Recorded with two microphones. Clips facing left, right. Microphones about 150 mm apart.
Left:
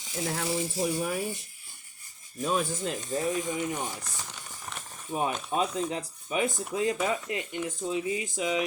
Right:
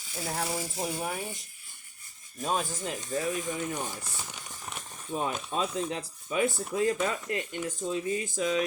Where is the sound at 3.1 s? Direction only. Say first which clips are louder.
Left 1 dB; 25° left (ahead or behind).